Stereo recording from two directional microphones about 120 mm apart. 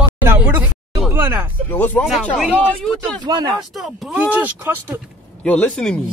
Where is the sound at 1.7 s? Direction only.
15° left (ahead or behind).